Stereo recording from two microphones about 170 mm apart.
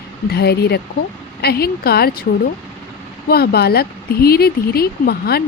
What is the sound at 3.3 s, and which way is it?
A woman's voice, 65° left (ahead or behind).